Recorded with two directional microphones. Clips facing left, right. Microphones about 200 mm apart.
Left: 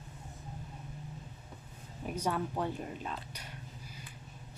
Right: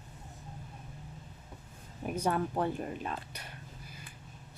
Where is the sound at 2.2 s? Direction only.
55° right (ahead or behind).